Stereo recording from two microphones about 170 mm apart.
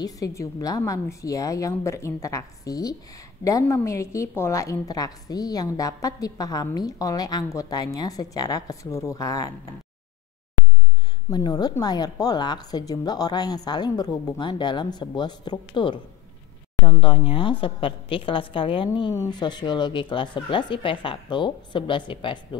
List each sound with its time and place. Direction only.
0.0 s a woman's voice: 20° left (ahead or behind)
11.2 s a woman's voice: 25° left (ahead or behind)